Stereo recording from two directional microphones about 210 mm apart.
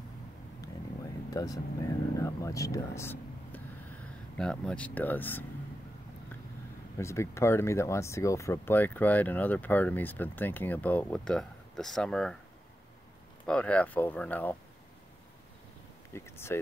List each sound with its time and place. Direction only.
1.3 s speech: 15° left (ahead or behind)
7.0 s speech: 15° left (ahead or behind)
13.5 s speech: 5° left (ahead or behind)
16.1 s speech: 10° left (ahead or behind)